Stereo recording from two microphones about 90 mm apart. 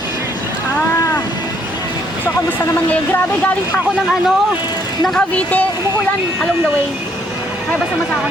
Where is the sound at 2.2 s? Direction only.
15° left (ahead or behind).